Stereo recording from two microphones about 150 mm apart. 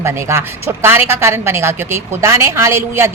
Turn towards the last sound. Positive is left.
turn(degrees=-15)  # may be behind; listen again after turning